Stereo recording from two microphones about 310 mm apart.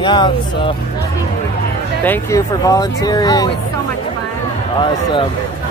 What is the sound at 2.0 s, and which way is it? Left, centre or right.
Speech, centre.